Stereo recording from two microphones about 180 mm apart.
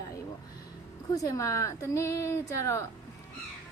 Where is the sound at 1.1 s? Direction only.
20° left (ahead or behind).